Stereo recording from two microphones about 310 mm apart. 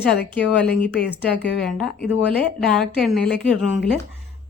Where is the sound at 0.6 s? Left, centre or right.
Centre.